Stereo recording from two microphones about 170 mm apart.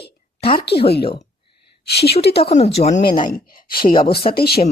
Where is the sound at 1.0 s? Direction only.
30° left (ahead or behind).